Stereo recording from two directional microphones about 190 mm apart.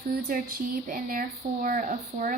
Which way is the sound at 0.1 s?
50° right (ahead or behind).